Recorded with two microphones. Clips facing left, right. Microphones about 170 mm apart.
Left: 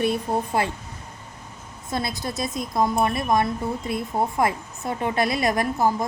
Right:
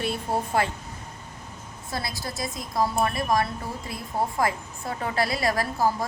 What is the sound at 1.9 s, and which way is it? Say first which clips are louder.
A woman's voice: left 5 dB; 20° left (ahead or behind).